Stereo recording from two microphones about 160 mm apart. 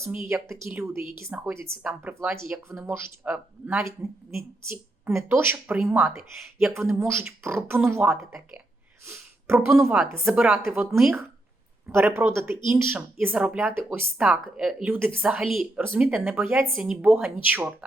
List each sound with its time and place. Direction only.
0.0 s speech: 15° right (ahead or behind); by 6.7 s centre (ahead or behind)
6.7 s speech: 15° right (ahead or behind)
11.9 s speech: 15° right (ahead or behind)
15.8 s speech: 10° right (ahead or behind)